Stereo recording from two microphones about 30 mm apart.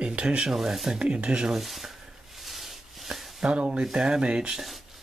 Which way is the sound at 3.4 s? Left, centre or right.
Right.